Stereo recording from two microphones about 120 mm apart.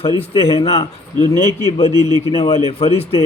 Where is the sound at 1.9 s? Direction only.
35° right (ahead or behind).